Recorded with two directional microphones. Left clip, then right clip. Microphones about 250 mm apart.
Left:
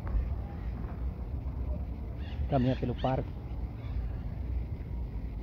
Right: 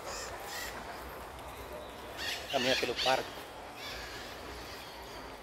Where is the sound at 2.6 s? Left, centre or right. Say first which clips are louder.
Right 3 dB; centre.